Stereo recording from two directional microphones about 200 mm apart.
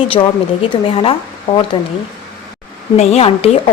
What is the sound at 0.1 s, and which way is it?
A woman's voice, 25° left (ahead or behind).